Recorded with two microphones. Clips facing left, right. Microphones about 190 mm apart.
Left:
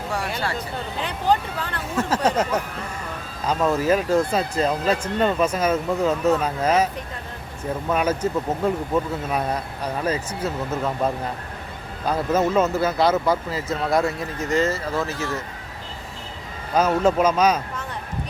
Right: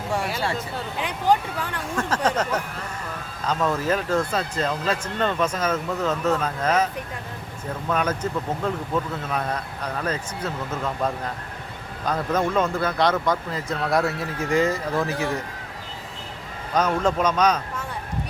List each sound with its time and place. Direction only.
0.9 s speech: 10° right (ahead or behind)
2.0 s speech: 10° left (ahead or behind)
3.7 s speech: 10° left (ahead or behind); by 15.4 s 15° right (ahead or behind)
17.0 s speech: 10° left (ahead or behind)